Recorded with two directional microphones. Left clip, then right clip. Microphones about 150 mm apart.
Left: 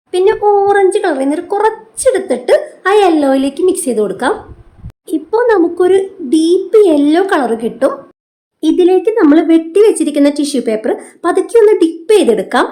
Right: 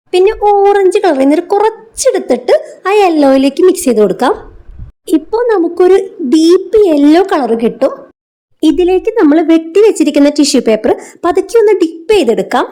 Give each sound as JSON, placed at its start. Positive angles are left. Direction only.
{"t": 0.1, "sound": "speech", "side_deg": -45}
{"t": 8.6, "sound": "speech", "side_deg": -50}